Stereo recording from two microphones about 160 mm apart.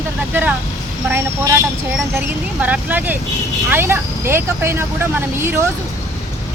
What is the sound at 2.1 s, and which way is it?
Speech, 10° right (ahead or behind).